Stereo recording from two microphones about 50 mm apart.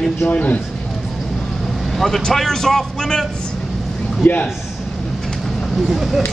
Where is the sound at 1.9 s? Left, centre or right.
Centre.